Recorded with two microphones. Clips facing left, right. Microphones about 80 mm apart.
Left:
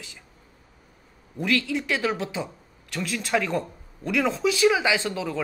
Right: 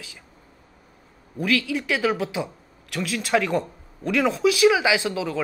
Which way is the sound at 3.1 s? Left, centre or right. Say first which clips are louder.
Right 3 dB; centre.